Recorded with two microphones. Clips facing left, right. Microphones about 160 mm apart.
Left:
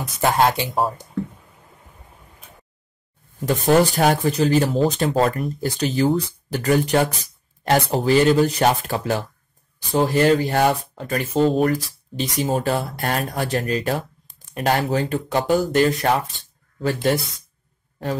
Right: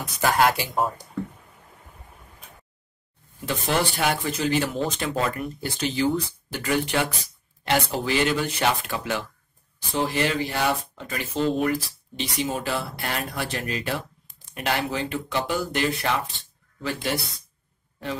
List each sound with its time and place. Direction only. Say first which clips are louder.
0.2 s speech: left 3 dB; 25° left (ahead or behind)
3.3 s speech: left 9 dB; 40° left (ahead or behind)